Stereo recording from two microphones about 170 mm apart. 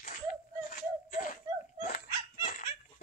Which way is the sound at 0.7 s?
55° left (ahead or behind).